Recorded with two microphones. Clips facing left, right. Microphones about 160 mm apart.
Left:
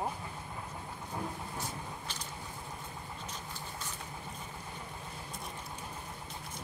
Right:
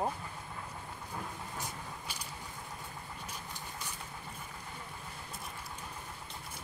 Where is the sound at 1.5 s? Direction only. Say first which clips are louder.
Left 2 dB; 10° right (ahead or behind).